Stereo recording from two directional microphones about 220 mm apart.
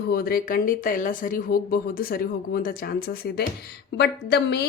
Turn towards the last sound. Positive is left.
turn(degrees=50)  # may be behind; listen again after turning